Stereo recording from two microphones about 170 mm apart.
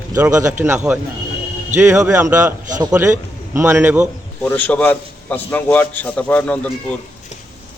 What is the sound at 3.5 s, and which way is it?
Speech, 15° right (ahead or behind).